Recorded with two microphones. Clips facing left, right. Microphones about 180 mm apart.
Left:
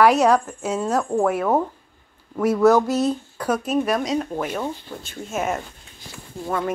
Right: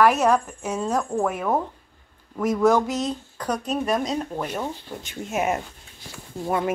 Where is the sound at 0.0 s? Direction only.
10° left (ahead or behind).